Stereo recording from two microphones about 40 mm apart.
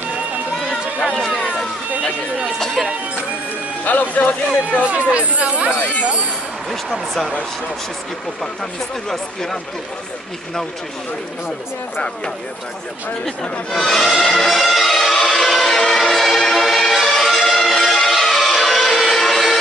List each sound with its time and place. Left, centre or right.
1.1 s run: centre
3.8 s speech: left
4.8 s speech: right
5.8 s speech: left
6.7 s speech: centre
9.1 s speech: centre
13.7 s speech: centre
14.1 s music: centre